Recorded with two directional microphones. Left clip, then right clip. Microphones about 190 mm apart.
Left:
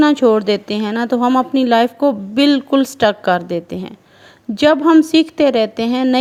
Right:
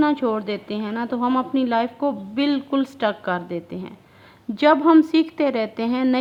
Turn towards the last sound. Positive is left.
turn(degrees=30)  # may be behind; listen again after turning